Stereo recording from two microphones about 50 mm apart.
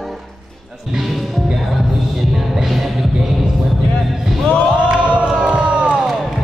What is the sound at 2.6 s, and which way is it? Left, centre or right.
Music, centre.